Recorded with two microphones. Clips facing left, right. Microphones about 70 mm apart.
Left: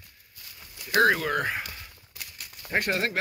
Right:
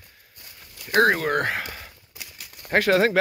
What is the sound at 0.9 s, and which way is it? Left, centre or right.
Speech, right.